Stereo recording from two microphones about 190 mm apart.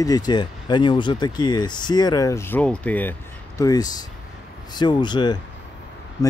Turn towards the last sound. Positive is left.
turn(degrees=25)  # may be behind; listen again after turning